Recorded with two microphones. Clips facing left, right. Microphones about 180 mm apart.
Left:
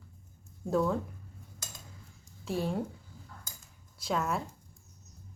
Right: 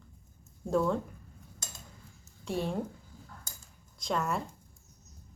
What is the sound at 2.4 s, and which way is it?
Speech, centre (ahead or behind).